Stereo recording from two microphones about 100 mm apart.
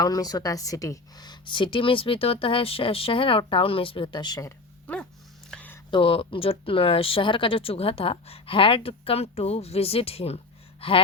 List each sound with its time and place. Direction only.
0.0 s speech: 40° left (ahead or behind)
5.5 s a sound: 10° left (ahead or behind)
5.9 s speech: 65° left (ahead or behind)